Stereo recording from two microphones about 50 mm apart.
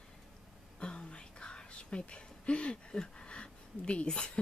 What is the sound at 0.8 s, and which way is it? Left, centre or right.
A woman's voice, left.